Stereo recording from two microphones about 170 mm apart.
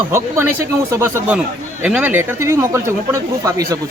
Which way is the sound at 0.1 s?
15° right (ahead or behind).